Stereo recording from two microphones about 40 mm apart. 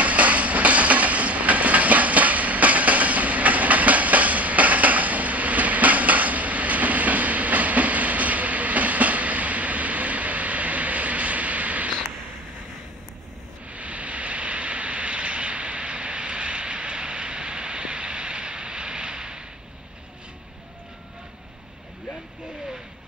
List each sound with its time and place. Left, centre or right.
0.0 s train: right
13.7 s vehicle: right